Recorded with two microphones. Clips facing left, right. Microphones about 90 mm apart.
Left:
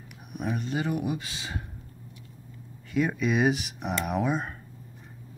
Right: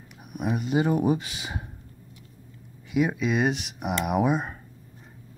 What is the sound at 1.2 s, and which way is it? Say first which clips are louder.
Speech: right 1 dB; 20° right (ahead or behind).